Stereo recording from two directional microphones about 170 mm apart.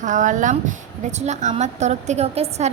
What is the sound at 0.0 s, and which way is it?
A woman's voice, 45° right (ahead or behind).